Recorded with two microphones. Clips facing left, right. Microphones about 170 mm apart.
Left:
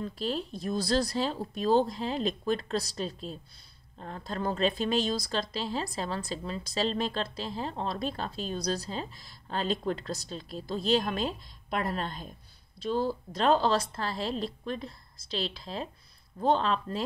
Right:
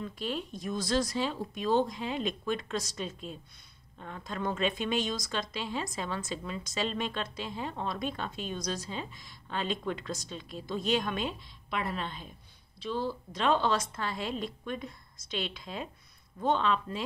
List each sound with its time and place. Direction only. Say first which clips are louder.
0.0 s speech: left 3 dB; 35° left (ahead or behind)